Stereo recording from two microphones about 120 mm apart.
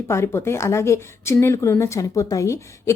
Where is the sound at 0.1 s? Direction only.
25° left (ahead or behind).